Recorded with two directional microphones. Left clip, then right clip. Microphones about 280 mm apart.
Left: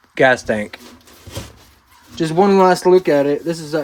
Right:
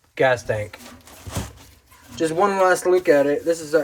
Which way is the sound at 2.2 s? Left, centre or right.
Left.